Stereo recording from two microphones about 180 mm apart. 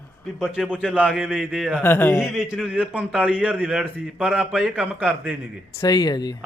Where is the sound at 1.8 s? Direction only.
10° left (ahead or behind).